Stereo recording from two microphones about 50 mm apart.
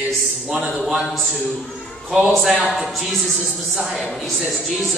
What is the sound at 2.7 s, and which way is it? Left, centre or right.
A woman's voice, centre.